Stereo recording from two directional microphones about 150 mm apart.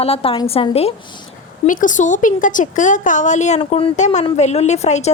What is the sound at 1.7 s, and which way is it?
A woman's voice, 60° left (ahead or behind).